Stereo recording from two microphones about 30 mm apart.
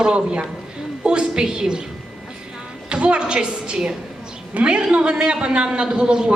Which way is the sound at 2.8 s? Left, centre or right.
Right.